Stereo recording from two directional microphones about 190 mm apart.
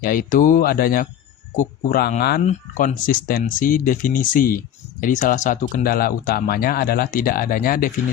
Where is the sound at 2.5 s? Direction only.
40° left (ahead or behind).